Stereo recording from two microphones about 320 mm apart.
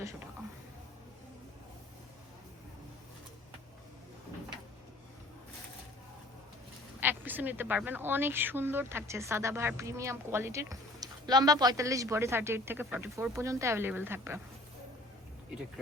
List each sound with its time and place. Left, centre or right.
7.0 s speech: centre